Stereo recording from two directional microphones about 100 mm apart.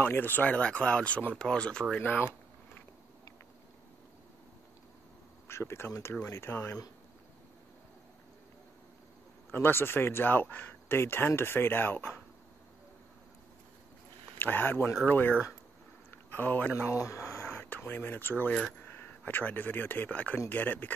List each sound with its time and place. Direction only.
0.0 s speech: 20° left (ahead or behind)
2.0 s speech: 20° left (ahead or behind)
5.5 s speech: 25° left (ahead or behind)
9.5 s speech: 25° left (ahead or behind)
14.4 s speech: 20° left (ahead or behind)
16.3 s speech: 15° left (ahead or behind)
17.6 s speech: 15° left (ahead or behind)